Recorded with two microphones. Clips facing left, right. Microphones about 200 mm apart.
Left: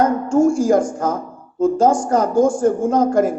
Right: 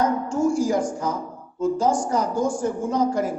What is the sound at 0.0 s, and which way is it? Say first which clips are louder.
A woman's voice: left 6 dB; 50° left (ahead or behind).